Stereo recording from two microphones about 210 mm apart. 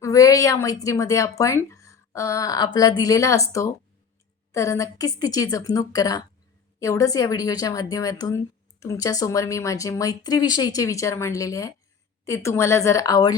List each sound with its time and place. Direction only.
0.0 s speech: 15° left (ahead or behind)